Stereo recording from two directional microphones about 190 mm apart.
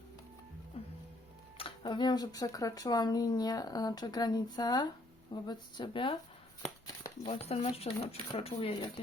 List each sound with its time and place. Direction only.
0.8 s music: 30° left (ahead or behind)
1.5 s speech: 25° left (ahead or behind)
6.8 s a sound: 20° left (ahead or behind)
7.3 s speech: 30° left (ahead or behind)